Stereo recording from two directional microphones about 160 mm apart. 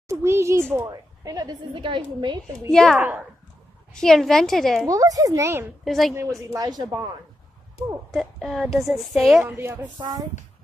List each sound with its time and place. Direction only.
0.1 s a woman's voice: 15° right (ahead or behind)
2.7 s a woman's voice: 5° left (ahead or behind)
3.0 s a woman's voice: 15° right (ahead or behind)
3.9 s a woman's voice: 5° left (ahead or behind)
4.8 s a woman's voice: 20° right (ahead or behind)
5.9 s a woman's voice: centre (ahead or behind)
6.1 s a woman's voice: 20° right (ahead or behind)
8.1 s a woman's voice: centre (ahead or behind)
9.4 s a woman's voice: 15° right (ahead or behind)
9.9 s a woman's voice: 25° right (ahead or behind)